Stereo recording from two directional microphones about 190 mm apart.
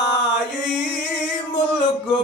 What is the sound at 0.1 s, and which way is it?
Mantra, 65° left (ahead or behind).